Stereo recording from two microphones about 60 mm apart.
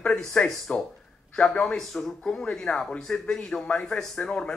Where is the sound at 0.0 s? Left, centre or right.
Centre.